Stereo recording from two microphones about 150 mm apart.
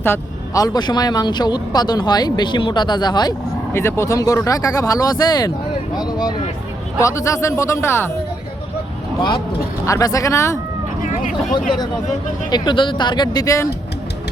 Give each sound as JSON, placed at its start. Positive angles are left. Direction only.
{"t": 0.0, "sound": "speech", "side_deg": 20}
{"t": 3.7, "sound": "speech", "side_deg": 15}
{"t": 9.8, "sound": "speech", "side_deg": 20}
{"t": 11.0, "sound": "speech", "side_deg": 60}
{"t": 12.5, "sound": "speech", "side_deg": 30}